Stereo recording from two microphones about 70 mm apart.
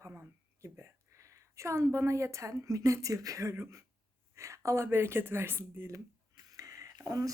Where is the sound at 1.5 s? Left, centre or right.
Right.